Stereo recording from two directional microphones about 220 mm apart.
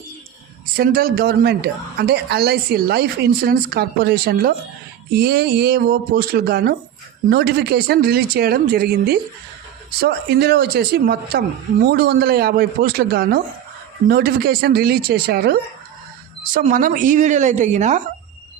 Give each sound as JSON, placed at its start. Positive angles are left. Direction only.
{"t": 0.8, "sound": "a woman's voice", "side_deg": -45}